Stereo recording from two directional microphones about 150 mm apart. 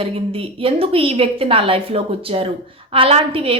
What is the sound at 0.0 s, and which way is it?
A woman's voice, 40° right (ahead or behind).